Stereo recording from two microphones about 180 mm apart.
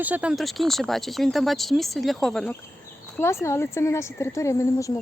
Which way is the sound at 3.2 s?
15° left (ahead or behind).